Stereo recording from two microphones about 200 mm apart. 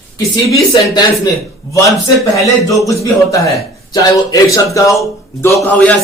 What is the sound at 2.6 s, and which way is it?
Speech, 15° left (ahead or behind).